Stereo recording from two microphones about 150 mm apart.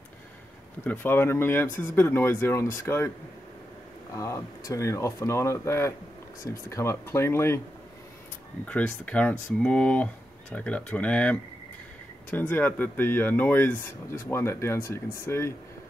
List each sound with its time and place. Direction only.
0.8 s speech: 15° left (ahead or behind)
4.1 s speech: 20° left (ahead or behind)
8.6 s speech: 10° left (ahead or behind)